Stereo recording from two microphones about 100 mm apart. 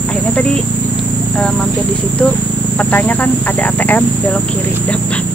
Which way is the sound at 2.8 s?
15° left (ahead or behind).